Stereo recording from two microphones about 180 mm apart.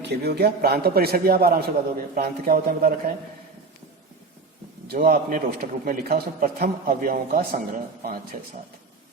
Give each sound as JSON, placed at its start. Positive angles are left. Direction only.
{"t": 0.0, "sound": "a man's voice", "side_deg": -65}
{"t": 4.9, "sound": "a man's voice", "side_deg": -55}